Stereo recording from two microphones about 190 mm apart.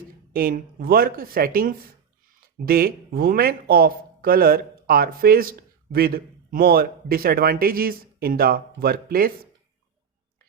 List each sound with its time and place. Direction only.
0.3 s speech: 50° right (ahead or behind)